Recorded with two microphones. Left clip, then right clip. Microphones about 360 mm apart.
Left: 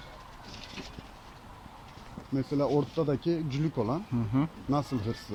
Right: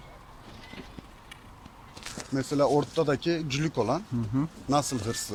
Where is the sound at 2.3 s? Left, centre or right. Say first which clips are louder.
Right 4 dB; right.